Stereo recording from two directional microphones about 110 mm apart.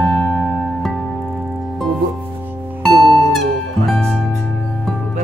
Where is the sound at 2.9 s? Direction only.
55° right (ahead or behind).